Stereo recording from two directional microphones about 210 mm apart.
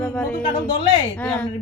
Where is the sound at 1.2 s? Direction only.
5° left (ahead or behind).